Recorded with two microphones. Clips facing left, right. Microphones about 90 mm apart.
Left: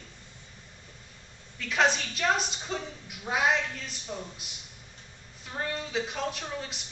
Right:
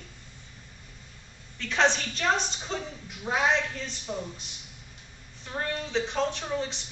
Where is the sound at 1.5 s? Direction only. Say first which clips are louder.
Right 1 dB; 5° left (ahead or behind).